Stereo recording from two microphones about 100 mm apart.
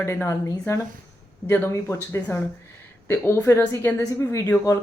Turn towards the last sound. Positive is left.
turn(degrees=30)  # may be behind; listen again after turning